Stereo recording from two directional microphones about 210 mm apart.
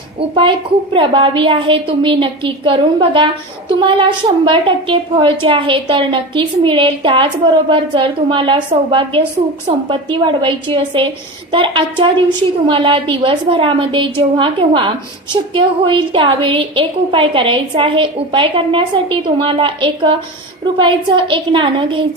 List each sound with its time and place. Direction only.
0.2 s a woman's voice: 25° right (ahead or behind)